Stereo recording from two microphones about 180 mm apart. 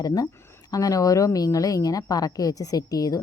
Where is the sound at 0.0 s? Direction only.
20° left (ahead or behind).